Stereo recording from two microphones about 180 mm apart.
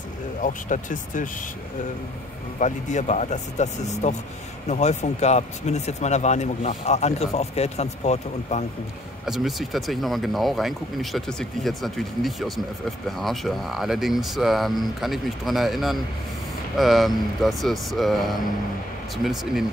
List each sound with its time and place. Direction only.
0.4 s speech: 45° left (ahead or behind)
2.6 s speech: 40° left (ahead or behind)
9.2 s speech: centre (ahead or behind)